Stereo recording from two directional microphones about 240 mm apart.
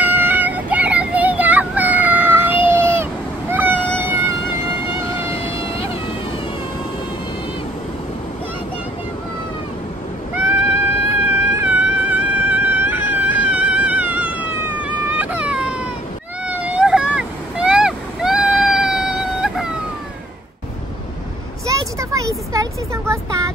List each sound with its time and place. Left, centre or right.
0.0 s child singing: centre
2.7 s cat: centre
4.0 s music: centre
5.0 s vehicle: centre
5.3 s insect: left
11.2 s a sound: centre
16.5 s vehicle: centre
21.6 s a sound: centre